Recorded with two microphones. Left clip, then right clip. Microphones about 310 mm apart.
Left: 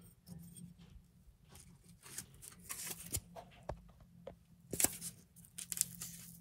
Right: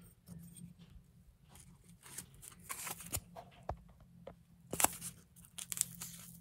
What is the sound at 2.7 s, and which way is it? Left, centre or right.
Shuffling cards, centre.